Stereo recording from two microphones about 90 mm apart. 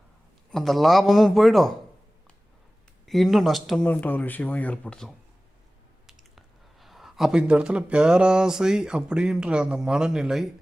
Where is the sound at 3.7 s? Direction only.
15° left (ahead or behind).